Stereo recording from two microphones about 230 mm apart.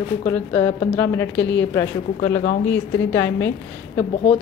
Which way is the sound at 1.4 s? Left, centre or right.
Left.